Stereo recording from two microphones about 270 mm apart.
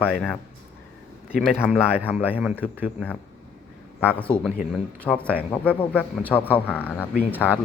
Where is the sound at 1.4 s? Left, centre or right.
Centre.